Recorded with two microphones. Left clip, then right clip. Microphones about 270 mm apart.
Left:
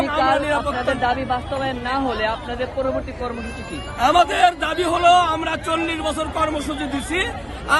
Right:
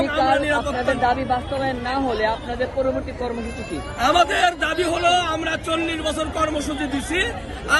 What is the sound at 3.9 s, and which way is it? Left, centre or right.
A man's voice, centre.